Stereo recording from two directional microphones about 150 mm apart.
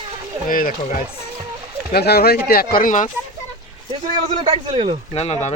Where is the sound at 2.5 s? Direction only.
80° left; by 3.1 s 60° left (ahead or behind).